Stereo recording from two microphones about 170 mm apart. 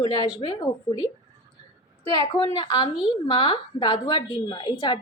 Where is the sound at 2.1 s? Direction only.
30° left (ahead or behind).